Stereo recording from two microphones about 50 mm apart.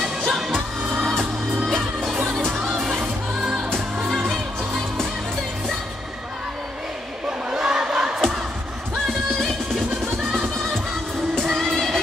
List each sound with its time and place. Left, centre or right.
0.3 s music: centre
1.7 s music: centre
2.5 s music: centre
4.3 s music: centre
7.2 s crowd: centre
9.0 s music: centre
11.6 s music: centre